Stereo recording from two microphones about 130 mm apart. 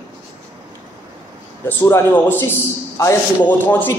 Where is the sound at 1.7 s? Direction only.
15° left (ahead or behind).